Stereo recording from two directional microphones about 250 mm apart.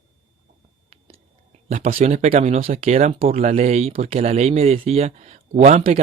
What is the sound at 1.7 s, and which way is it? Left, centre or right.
Speech, right.